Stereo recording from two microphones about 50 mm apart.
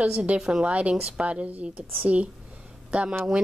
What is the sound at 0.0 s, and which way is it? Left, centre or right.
A woman's voice, right.